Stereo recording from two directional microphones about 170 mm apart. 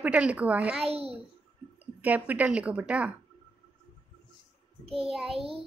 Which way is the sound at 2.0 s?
10° right (ahead or behind).